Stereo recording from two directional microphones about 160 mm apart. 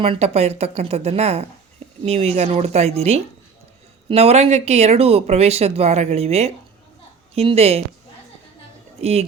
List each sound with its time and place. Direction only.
0.0 s speech: 40° right (ahead or behind)
9.0 s speech: 40° right (ahead or behind)